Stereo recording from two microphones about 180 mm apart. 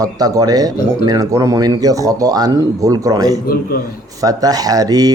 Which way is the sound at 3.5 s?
55° left (ahead or behind).